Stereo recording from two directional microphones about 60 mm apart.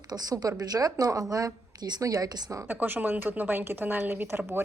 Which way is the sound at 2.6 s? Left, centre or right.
Right.